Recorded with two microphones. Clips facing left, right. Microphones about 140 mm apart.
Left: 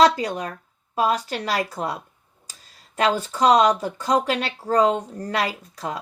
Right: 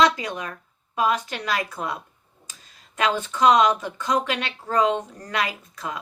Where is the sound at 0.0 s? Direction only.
35° left (ahead or behind).